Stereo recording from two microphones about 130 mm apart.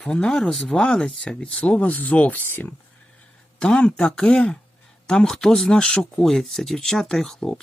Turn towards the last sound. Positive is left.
turn(degrees=5)  # may be behind; listen again after turning